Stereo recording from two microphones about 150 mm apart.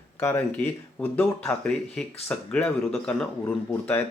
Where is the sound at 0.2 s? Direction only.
15° left (ahead or behind).